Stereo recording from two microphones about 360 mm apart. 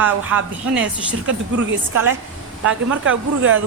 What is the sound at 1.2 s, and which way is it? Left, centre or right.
Speech, right.